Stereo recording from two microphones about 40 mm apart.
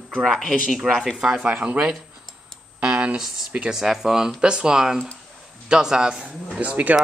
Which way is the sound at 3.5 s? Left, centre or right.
Right.